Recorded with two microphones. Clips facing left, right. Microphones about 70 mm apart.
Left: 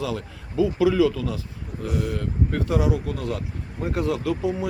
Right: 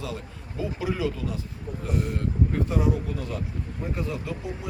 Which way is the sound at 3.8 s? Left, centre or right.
Left.